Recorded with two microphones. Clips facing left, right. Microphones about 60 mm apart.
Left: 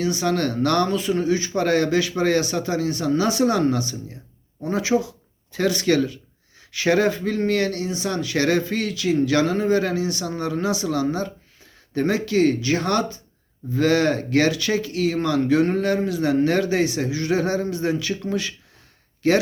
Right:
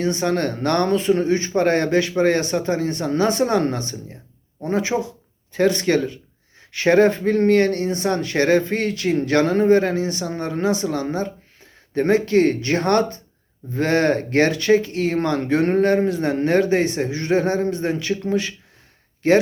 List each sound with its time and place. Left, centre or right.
0.0 s speech: right
9.8 s speech: right